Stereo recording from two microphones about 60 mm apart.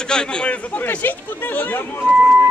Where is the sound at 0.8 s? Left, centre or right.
Left.